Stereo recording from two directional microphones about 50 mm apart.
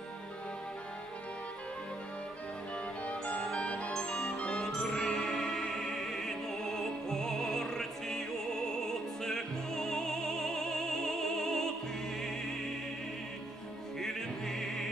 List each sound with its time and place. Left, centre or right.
3.1 s music: left
14.0 s music: centre